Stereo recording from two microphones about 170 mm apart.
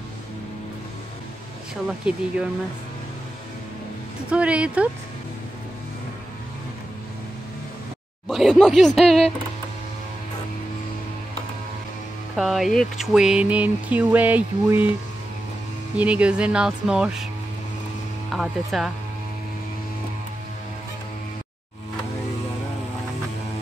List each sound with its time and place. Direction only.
2.0 s speech: 5° right (ahead or behind)
4.3 s speech: 5° right (ahead or behind)
8.3 s speech: centre (ahead or behind)
12.4 s speech: centre (ahead or behind)
16.0 s speech: 5° right (ahead or behind)
18.3 s speech: centre (ahead or behind)